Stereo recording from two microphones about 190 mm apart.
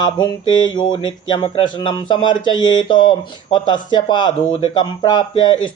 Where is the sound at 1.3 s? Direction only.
25° left (ahead or behind).